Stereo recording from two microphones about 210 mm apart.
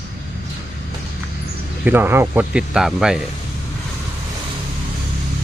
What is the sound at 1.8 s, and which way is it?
Speech, 10° right (ahead or behind).